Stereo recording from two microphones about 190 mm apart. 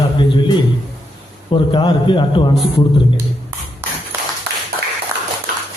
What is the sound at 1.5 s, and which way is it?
A man's voice, 25° left (ahead or behind).